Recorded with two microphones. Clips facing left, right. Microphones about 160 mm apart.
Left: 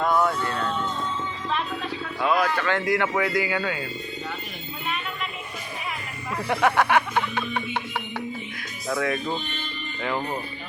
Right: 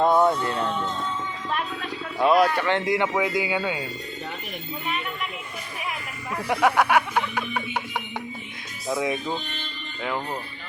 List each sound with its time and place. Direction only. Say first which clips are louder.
0.0 s speech: right 3 dB; 25° right (ahead or behind)
2.1 s a sound: right 4 dB; 15° right (ahead or behind)
2.6 s speech: right 1 dB; 25° right (ahead or behind)
6.5 s speech: right 1 dB; 10° right (ahead or behind)
10.0 s speech: left 1 dB; centre (ahead or behind)